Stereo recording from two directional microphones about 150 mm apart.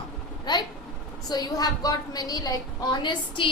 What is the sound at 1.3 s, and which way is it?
A woman's voice, 25° left (ahead or behind).